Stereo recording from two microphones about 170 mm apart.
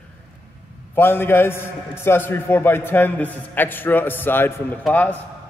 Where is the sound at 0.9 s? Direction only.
10° left (ahead or behind).